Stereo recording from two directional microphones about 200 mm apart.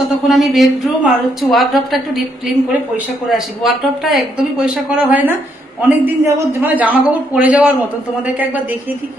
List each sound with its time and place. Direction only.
0.3 s a woman's voice: centre (ahead or behind)